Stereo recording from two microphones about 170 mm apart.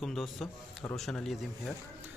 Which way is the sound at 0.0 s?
Centre (ahead or behind).